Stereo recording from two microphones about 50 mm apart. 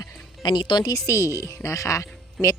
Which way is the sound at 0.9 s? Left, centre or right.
Left.